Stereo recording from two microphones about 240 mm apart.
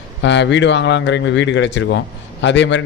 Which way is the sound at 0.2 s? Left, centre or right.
Left.